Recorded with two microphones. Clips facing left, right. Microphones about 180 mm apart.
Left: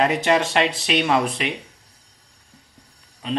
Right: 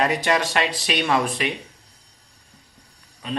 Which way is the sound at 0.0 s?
25° left (ahead or behind).